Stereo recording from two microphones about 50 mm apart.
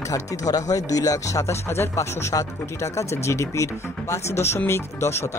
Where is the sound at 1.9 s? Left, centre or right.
Left.